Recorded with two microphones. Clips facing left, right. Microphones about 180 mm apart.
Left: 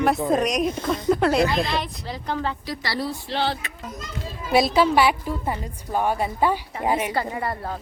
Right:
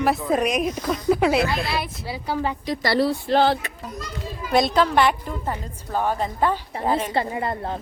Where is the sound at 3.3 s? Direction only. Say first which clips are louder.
Right 7 dB; 45° right (ahead or behind).